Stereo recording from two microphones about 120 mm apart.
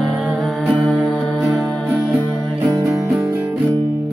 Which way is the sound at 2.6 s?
20° right (ahead or behind).